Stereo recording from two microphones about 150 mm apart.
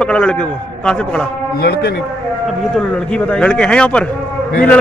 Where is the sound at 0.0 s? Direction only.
5° left (ahead or behind).